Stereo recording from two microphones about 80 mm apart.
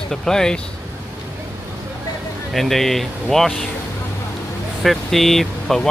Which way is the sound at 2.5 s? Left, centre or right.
Centre.